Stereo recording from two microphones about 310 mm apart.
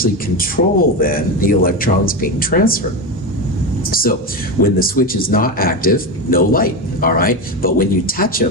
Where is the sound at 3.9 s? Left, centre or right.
Left.